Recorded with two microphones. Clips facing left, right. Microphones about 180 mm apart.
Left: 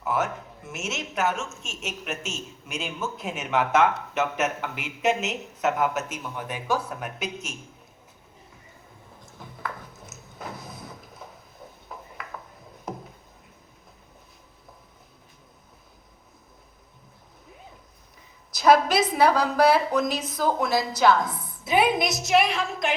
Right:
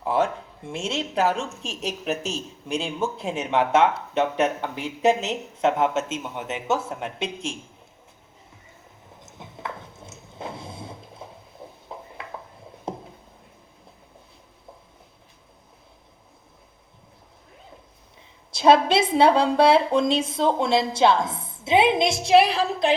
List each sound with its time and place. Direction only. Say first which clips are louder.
0.0 s a woman's voice: right 4 dB; 30° right (ahead or behind)
9.2 s a sound: right 1 dB; 25° right (ahead or behind)
18.5 s a woman's voice: right 2 dB; 25° right (ahead or behind)